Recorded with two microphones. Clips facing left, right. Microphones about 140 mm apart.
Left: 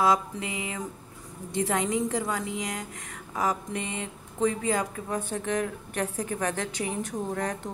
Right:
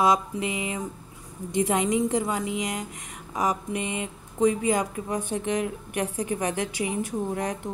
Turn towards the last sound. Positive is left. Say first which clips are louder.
# right 2 dB
turn(degrees=-15)  # may be behind; listen again after turning